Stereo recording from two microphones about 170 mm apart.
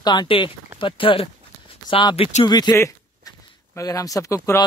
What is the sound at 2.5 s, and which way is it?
Speech, 25° left (ahead or behind).